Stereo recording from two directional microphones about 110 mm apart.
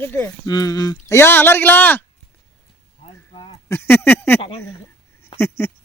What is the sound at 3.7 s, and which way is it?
Speech, 20° left (ahead or behind).